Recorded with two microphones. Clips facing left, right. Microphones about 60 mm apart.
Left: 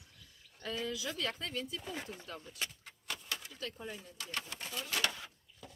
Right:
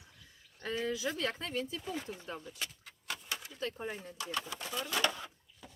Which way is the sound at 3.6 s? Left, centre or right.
Right.